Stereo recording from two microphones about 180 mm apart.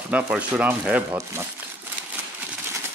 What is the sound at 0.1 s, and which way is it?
Speech, 5° right (ahead or behind).